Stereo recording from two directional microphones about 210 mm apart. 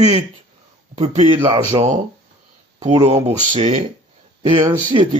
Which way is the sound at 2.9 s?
30° right (ahead or behind).